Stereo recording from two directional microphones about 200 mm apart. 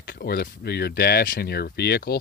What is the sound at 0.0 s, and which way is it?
Speech, 55° left (ahead or behind).